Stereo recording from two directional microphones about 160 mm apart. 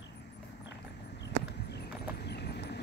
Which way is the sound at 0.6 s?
90° left.